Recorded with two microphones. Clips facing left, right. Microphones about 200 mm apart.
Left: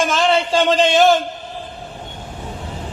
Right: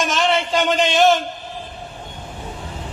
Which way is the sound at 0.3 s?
30° left (ahead or behind).